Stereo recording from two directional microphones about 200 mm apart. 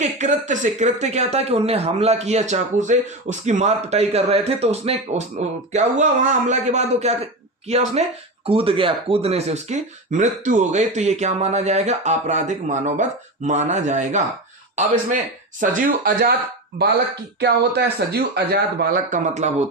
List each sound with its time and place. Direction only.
0.0 s speech: 35° right (ahead or behind)
15.6 s speech: 40° right (ahead or behind)
17.4 s speech: 55° right (ahead or behind); by 19.6 s 35° right (ahead or behind)